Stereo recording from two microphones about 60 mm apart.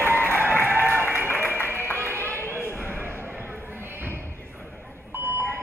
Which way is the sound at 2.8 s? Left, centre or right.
Right.